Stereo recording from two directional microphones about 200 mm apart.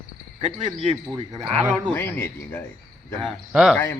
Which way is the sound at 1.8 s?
10° left (ahead or behind).